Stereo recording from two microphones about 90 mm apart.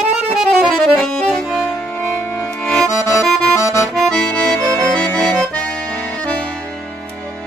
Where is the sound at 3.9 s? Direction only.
5° left (ahead or behind).